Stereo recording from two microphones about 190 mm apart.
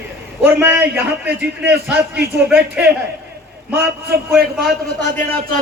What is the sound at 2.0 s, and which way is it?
Speech, 55° right (ahead or behind).